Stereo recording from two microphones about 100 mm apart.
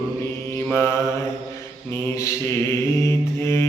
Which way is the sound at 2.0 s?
30° left (ahead or behind).